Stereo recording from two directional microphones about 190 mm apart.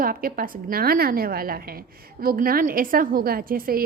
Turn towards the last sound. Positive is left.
turn(degrees=-50)  # may be behind; listen again after turning